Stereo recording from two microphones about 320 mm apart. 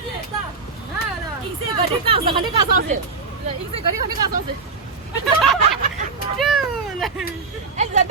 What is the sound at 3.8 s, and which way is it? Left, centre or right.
Speech, right.